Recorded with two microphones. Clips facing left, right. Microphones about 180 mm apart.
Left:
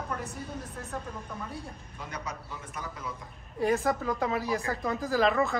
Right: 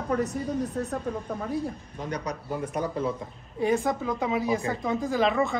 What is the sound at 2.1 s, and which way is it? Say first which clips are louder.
Speech: right 8 dB; 40° right (ahead or behind).